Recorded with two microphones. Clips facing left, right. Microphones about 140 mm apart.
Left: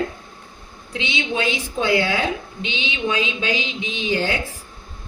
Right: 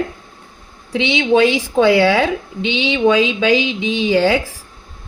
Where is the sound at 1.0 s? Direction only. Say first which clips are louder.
Right 11 dB; 90° right.